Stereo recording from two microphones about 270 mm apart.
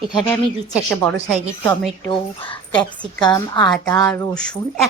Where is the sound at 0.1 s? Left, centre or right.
Centre.